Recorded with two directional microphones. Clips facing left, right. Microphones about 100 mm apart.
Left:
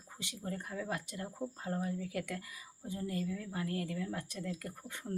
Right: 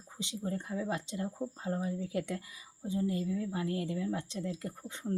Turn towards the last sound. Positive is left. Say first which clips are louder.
# right 5 dB
turn(degrees=-20)  # may be behind; listen again after turning